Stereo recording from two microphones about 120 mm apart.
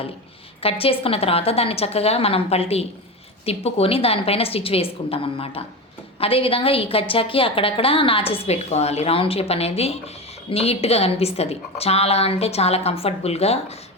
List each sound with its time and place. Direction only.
0.6 s a woman's voice: 50° left (ahead or behind)